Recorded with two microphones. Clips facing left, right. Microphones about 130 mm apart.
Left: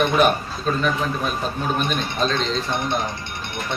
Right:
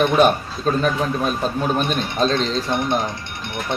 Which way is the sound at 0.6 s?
40° right (ahead or behind).